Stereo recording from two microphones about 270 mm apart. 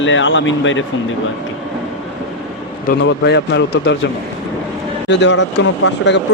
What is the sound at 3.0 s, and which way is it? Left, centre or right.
Speech, left.